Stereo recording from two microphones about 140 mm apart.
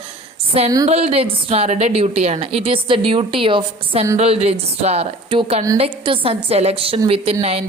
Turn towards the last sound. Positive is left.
turn(degrees=-45)  # may be behind; listen again after turning